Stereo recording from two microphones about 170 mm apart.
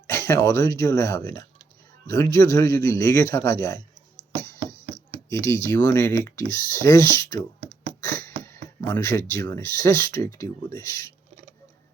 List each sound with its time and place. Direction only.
0.1 s a man's voice: 15° left (ahead or behind)
4.9 s speech: 15° left (ahead or behind)
8.0 s a sound: 15° left (ahead or behind)
8.8 s a man's voice: 15° left (ahead or behind)